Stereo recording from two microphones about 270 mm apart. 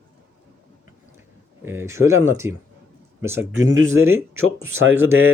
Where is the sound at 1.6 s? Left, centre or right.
Centre.